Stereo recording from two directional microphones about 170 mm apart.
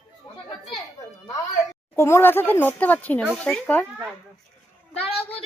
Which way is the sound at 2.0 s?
15° left (ahead or behind).